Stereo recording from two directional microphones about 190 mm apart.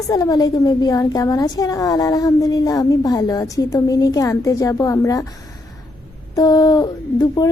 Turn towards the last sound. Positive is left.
turn(degrees=20)  # may be behind; listen again after turning